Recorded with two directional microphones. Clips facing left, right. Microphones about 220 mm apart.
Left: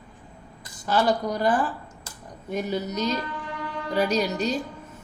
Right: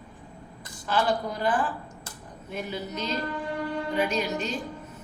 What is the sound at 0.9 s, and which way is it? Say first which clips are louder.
A woman's voice: left 3 dB; 40° left (ahead or behind).